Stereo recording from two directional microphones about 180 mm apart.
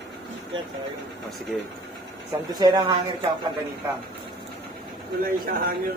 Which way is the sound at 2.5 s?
20° right (ahead or behind).